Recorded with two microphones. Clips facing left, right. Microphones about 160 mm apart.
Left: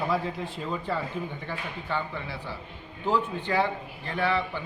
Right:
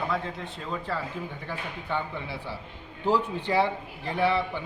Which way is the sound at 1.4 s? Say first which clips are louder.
Even; 15° right (ahead or behind).